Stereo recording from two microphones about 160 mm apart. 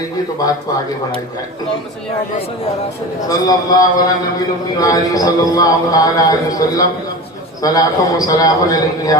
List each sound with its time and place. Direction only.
3.2 s a man's voice: 25° left (ahead or behind)